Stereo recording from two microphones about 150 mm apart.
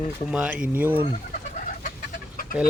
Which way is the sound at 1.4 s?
65° left (ahead or behind).